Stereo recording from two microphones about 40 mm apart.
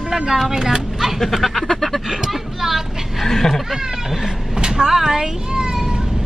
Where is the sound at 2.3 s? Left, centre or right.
Centre.